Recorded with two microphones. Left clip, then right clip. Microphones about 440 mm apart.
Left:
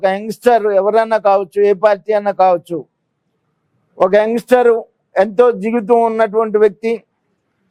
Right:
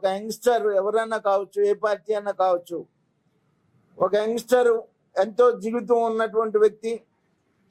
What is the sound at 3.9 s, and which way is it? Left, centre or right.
Speech, left.